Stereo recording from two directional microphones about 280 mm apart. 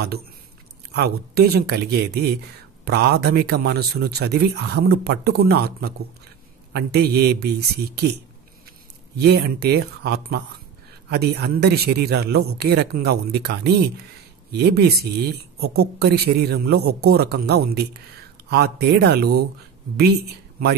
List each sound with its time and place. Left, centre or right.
0.9 s a man's voice: right
9.2 s a man's voice: right